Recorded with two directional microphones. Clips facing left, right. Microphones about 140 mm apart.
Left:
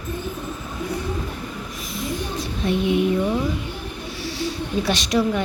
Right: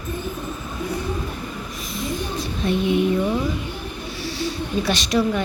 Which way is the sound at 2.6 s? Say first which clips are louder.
Even; 15° left (ahead or behind).